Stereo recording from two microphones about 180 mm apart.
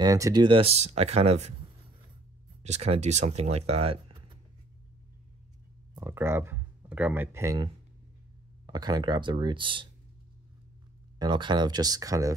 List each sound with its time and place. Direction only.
0.0 s speech: 20° right (ahead or behind); by 1.5 s 35° right (ahead or behind)
2.6 s speech: 35° right (ahead or behind)
5.9 s speech: 15° right (ahead or behind)
11.1 s speech: 25° right (ahead or behind)